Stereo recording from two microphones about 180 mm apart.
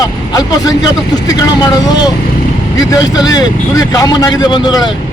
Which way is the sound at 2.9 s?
20° left (ahead or behind).